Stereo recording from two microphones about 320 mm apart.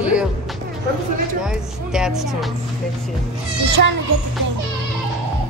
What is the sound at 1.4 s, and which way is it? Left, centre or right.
A woman's voice, centre.